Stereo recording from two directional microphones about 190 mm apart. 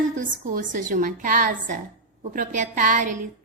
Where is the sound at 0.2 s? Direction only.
45° right (ahead or behind).